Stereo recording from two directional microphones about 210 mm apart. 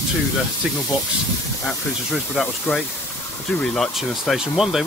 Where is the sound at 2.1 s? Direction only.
Centre (ahead or behind).